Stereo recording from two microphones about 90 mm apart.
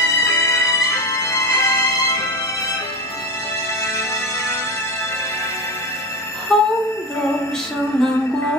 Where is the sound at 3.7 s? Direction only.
35° left (ahead or behind).